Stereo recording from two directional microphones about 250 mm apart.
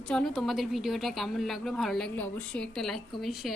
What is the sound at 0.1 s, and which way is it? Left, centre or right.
A woman's voice, centre.